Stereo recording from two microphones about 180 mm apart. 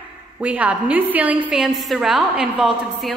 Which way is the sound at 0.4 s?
5° right (ahead or behind).